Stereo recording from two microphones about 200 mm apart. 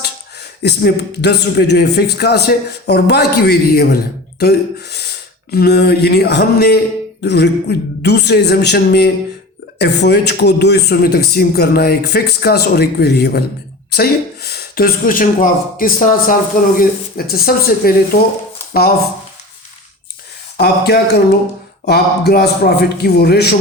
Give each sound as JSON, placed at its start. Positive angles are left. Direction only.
{"t": 0.0, "sound": "speech", "side_deg": 55}
{"t": 20.6, "sound": "speech", "side_deg": 55}